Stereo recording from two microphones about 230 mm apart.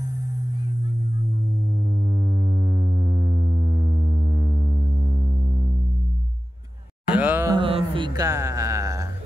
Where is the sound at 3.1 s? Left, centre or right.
Centre.